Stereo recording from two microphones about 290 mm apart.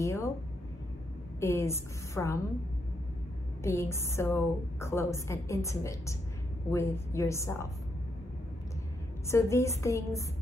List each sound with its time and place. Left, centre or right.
0.0 s speech: centre
1.4 s a woman's voice: centre
3.6 s a woman's voice: centre
9.3 s a woman's voice: centre